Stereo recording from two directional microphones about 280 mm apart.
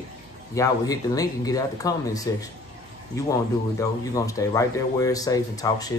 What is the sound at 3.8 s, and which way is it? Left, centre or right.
A man's voice, centre.